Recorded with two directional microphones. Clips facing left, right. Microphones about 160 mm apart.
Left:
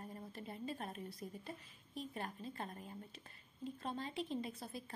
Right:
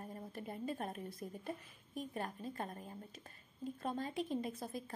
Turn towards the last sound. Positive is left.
turn(degrees=-45)  # may be behind; listen again after turning